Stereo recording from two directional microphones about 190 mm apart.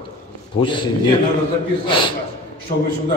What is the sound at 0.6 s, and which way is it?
Speech, 25° left (ahead or behind).